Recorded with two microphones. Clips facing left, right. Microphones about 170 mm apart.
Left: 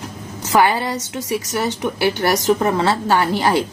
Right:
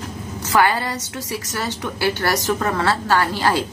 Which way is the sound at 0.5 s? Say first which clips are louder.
Left 2 dB; 20° left (ahead or behind).